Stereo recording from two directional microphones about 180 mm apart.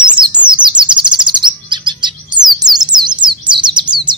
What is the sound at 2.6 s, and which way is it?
Bird, 25° right (ahead or behind).